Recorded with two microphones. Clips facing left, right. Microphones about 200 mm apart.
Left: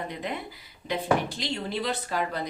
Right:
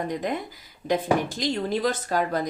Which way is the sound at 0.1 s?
45° right (ahead or behind).